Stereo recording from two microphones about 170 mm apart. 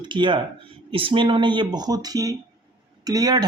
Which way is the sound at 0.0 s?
30° right (ahead or behind).